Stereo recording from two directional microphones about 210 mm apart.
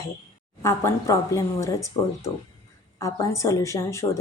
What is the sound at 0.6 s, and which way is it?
Speech, 15° left (ahead or behind).